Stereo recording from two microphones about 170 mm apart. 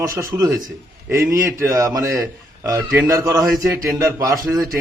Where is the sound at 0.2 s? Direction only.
20° right (ahead or behind).